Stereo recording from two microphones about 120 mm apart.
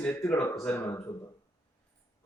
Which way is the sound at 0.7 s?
25° left (ahead or behind).